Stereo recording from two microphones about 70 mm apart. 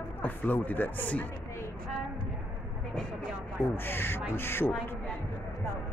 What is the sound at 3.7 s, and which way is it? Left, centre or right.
Speech, left.